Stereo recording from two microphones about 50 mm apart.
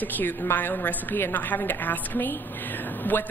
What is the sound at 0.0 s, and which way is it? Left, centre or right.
A woman's voice, left.